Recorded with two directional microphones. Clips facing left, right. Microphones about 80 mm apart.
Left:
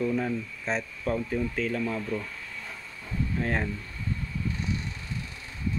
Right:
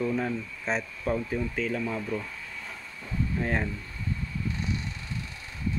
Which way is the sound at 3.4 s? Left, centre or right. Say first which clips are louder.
Even; centre.